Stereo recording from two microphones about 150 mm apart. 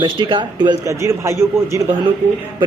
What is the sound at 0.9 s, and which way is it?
Speech, 20° right (ahead or behind).